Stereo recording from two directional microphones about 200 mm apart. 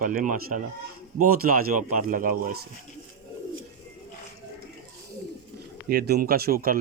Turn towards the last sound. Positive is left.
turn(degrees=-45)  # may be behind; listen again after turning